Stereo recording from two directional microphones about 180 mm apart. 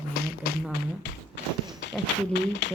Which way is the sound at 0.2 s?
55° left (ahead or behind).